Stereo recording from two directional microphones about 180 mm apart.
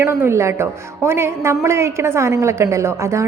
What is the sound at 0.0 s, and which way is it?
A woman's voice, 15° right (ahead or behind).